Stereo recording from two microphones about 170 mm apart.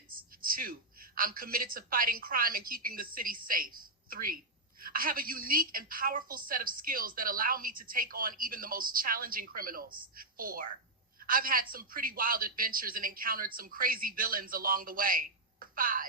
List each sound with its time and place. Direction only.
0.1 s a woman's voice: 55° right (ahead or behind)